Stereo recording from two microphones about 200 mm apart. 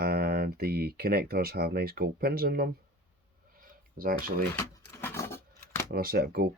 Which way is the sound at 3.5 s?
45° right (ahead or behind).